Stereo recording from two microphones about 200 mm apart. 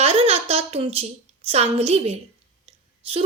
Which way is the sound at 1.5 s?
30° right (ahead or behind).